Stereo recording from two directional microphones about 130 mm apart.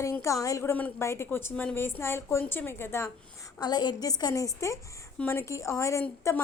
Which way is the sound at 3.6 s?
35° left (ahead or behind).